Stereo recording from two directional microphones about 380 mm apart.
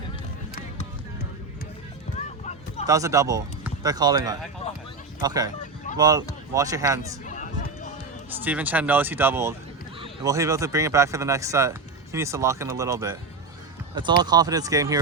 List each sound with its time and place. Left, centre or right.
2.1 s clip-clop: centre
2.8 s speech: centre
7.3 s run: centre
8.4 s speech: centre
14.2 s speech: centre